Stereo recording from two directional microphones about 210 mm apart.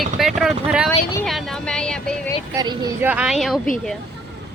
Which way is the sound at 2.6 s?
20° right (ahead or behind).